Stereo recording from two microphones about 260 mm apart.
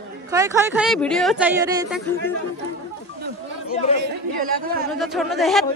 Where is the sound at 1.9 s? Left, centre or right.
Centre.